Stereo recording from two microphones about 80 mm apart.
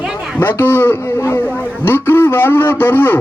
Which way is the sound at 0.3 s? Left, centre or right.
Left.